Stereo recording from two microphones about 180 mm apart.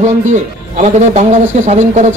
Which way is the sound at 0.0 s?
40° right (ahead or behind).